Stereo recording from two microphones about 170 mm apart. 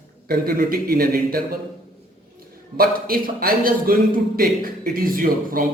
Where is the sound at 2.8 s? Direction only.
60° right (ahead or behind).